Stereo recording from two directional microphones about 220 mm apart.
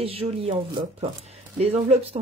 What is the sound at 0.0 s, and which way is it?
A woman's voice, 25° right (ahead or behind).